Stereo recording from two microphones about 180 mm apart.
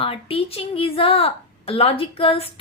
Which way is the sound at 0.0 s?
30° left (ahead or behind).